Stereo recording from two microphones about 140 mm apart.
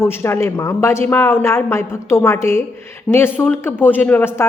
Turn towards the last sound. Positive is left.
turn(degrees=15)  # may be behind; listen again after turning